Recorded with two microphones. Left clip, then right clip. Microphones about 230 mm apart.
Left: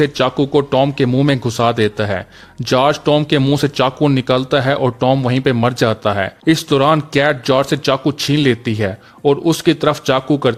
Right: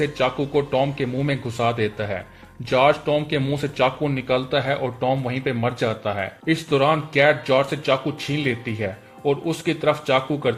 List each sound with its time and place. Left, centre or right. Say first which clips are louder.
0.0 s speech: left 7 dB; left